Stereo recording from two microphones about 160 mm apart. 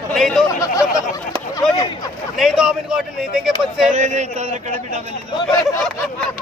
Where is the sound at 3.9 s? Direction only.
50° right (ahead or behind).